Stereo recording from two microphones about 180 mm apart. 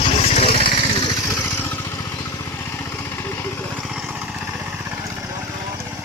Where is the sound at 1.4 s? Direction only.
15° left (ahead or behind).